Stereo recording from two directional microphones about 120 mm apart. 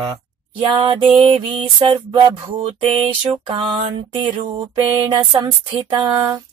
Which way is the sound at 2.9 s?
50° right (ahead or behind).